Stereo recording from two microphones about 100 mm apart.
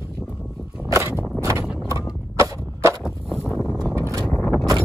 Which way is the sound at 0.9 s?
25° right (ahead or behind).